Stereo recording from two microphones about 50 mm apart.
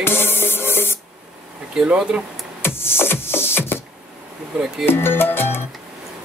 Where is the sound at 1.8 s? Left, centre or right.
Centre.